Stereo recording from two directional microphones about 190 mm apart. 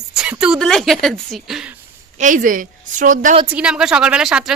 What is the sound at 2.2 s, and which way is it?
A woman's voice, 45° right (ahead or behind).